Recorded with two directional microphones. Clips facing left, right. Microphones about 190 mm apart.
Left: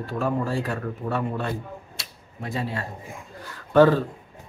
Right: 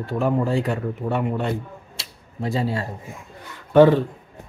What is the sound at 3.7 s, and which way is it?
Speech, 20° right (ahead or behind).